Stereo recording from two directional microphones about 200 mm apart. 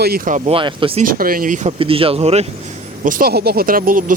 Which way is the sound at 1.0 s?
45° right (ahead or behind).